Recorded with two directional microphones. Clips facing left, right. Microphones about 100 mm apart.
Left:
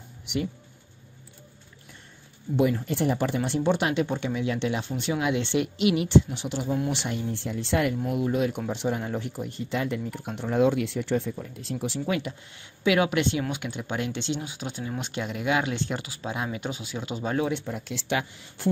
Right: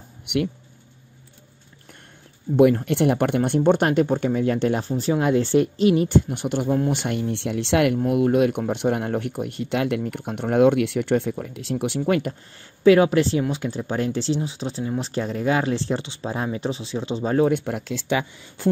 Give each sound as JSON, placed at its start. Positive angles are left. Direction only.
{"t": 0.3, "sound": "speech", "side_deg": -60}
{"t": 2.5, "sound": "speech", "side_deg": -60}
{"t": 8.0, "sound": "speech", "side_deg": -60}
{"t": 11.7, "sound": "speech", "side_deg": -60}
{"t": 12.8, "sound": "speech", "side_deg": -35}